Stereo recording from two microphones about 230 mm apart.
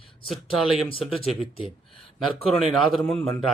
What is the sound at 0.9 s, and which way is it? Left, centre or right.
Speech, left.